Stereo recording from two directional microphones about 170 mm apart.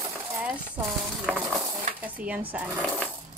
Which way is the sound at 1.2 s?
5° right (ahead or behind).